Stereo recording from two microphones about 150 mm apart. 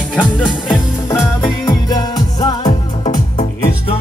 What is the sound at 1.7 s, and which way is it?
Music, 25° left (ahead or behind).